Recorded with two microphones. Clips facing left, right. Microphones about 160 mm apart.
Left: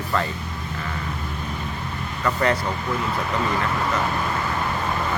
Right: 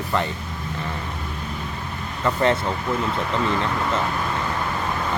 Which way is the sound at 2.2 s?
25° right (ahead or behind).